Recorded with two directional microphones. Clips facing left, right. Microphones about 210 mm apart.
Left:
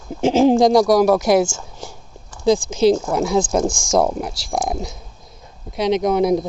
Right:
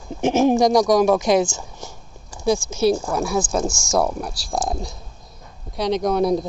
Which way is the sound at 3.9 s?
20° left (ahead or behind).